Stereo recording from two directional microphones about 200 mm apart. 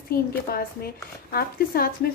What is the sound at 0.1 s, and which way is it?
A woman's voice, 50° left (ahead or behind).